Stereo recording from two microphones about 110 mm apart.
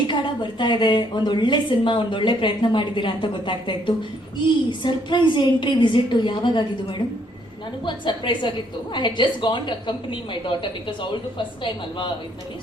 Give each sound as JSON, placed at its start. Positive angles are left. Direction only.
{"t": 0.1, "sound": "a woman's voice", "side_deg": 45}
{"t": 7.9, "sound": "a woman's voice", "side_deg": 45}